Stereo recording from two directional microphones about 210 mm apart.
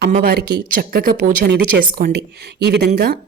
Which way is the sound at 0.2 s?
50° right (ahead or behind).